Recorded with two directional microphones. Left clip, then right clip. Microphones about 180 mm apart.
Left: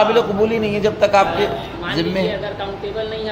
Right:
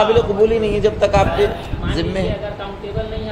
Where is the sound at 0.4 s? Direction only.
15° right (ahead or behind).